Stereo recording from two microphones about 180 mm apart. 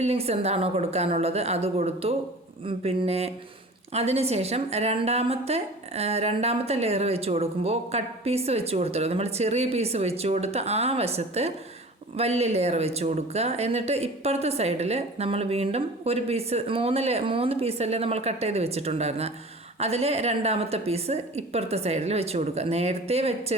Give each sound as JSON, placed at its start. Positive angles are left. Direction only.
{"t": 0.0, "sound": "a woman's voice", "side_deg": -35}